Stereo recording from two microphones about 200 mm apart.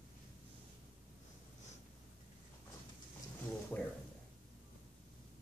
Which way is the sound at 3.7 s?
10° left (ahead or behind).